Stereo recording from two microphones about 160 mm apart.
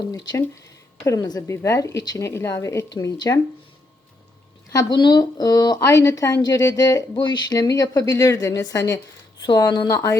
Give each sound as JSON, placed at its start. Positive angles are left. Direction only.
{"t": 0.1, "sound": "a woman's voice", "side_deg": 20}
{"t": 4.7, "sound": "a woman's voice", "side_deg": 25}